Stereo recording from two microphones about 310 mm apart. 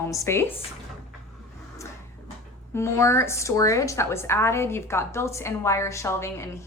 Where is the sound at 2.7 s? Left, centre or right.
Centre.